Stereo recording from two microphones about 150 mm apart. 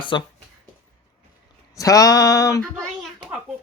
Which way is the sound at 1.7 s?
25° left (ahead or behind).